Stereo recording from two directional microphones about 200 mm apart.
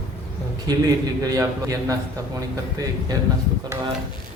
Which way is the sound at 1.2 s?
15° right (ahead or behind).